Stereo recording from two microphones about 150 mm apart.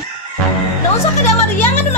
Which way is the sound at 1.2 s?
15° left (ahead or behind).